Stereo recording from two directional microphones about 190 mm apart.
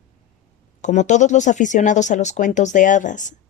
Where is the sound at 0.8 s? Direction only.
40° left (ahead or behind).